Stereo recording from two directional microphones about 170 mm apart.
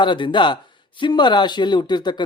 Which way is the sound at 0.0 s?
30° left (ahead or behind).